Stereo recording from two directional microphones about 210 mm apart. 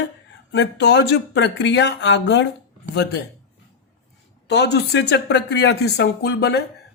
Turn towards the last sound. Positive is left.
turn(degrees=50)  # may be behind; listen again after turning